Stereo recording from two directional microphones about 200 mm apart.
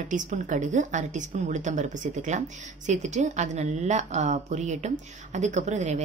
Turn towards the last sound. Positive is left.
turn(degrees=-35)  # may be behind; listen again after turning